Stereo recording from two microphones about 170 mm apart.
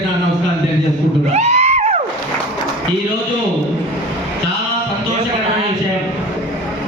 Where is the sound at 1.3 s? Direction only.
40° right (ahead or behind).